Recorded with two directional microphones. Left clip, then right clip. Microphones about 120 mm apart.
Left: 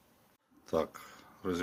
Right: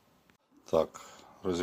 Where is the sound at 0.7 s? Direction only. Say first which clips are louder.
Right 5 dB; 20° right (ahead or behind).